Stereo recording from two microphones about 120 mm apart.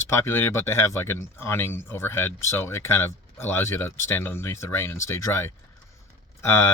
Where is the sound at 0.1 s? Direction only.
20° left (ahead or behind).